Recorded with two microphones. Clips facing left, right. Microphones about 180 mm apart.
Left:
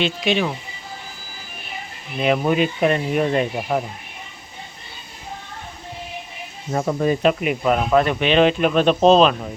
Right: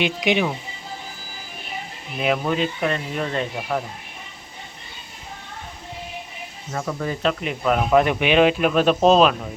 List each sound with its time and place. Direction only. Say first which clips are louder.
0.0 s speech: even; 15° right (ahead or behind)
2.1 s speech: left 3 dB; centre (ahead or behind)
2.4 s speech: left 4 dB; 15° left (ahead or behind)
6.7 s speech: left 7 dB; 30° left (ahead or behind); by 7.9 s centre (ahead or behind)
8.1 s speech: left 1 dB; 10° right (ahead or behind)